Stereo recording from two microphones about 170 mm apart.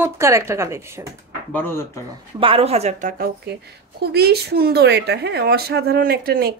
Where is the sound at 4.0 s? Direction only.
70° right (ahead or behind).